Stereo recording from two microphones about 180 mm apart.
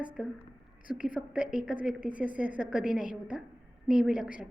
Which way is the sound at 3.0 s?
45° left (ahead or behind).